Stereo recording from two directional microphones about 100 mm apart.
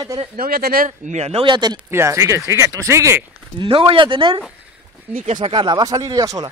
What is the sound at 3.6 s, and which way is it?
Speech, 60° right (ahead or behind).